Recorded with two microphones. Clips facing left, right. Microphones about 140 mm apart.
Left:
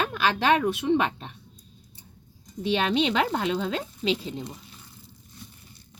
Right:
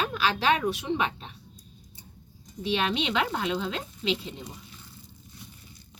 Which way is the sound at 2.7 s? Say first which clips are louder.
Left 4 dB; 45° left (ahead or behind).